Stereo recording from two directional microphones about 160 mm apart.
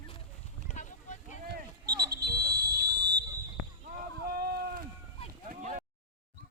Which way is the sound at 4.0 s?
70° right (ahead or behind).